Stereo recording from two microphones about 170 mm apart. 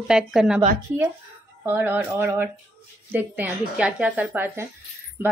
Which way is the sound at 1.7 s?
10° right (ahead or behind).